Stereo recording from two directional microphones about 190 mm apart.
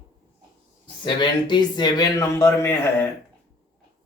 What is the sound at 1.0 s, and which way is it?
Speech, 25° left (ahead or behind).